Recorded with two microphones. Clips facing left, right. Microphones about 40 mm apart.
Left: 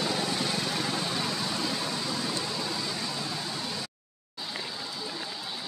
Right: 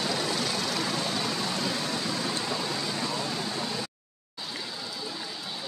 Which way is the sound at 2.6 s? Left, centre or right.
Right.